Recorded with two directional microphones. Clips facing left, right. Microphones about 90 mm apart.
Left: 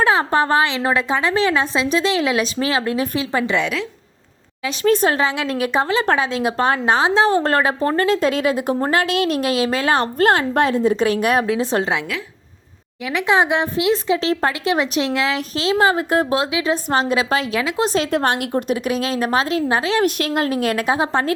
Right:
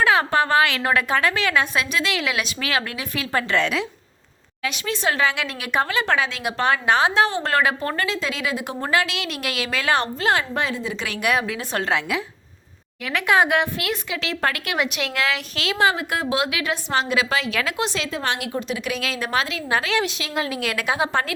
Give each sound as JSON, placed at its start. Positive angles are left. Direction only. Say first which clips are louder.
{"t": 0.0, "sound": "a woman's voice", "louder": "left 2 dB", "side_deg": 30}
{"t": 3.3, "sound": "a woman's voice", "louder": "left 1 dB", "side_deg": 10}
{"t": 4.7, "sound": "a woman's voice", "louder": "left 9 dB", "side_deg": 40}
{"t": 5.1, "sound": "a woman's voice", "louder": "left 3 dB", "side_deg": 30}
{"t": 8.0, "sound": "a woman's voice", "louder": "left 9 dB", "side_deg": 45}
{"t": 10.2, "sound": "a woman's voice", "louder": "left 6 dB", "side_deg": 50}
{"t": 11.5, "sound": "speech", "louder": "left 7 dB", "side_deg": 25}
{"t": 13.1, "sound": "a woman's voice", "louder": "left 2 dB", "side_deg": 20}
{"t": 16.5, "sound": "speech", "louder": "left 5 dB", "side_deg": 25}
{"t": 16.9, "sound": "a woman's voice", "louder": "left 2 dB", "side_deg": 35}
{"t": 18.1, "sound": "a woman's voice", "louder": "left 7 dB", "side_deg": 50}
{"t": 20.1, "sound": "a woman's voice", "louder": "left 7 dB", "side_deg": 50}